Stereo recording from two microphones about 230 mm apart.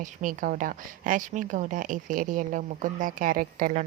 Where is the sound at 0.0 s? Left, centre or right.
Right.